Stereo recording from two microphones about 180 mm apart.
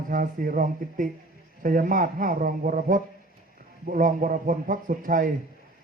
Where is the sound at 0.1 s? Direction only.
50° right (ahead or behind).